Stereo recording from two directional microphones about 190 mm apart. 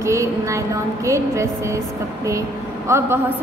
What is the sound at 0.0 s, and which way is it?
A woman's voice, 15° right (ahead or behind).